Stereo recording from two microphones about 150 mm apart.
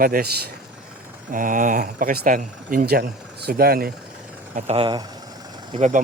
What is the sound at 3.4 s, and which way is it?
Speech, 90° right.